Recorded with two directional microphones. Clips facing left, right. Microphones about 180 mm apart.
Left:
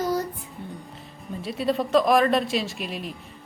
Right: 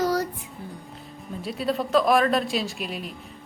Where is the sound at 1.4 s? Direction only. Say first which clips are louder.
Left 2 dB; centre (ahead or behind).